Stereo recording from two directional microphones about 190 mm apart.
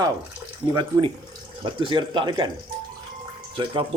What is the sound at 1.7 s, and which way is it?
Speech, 25° right (ahead or behind).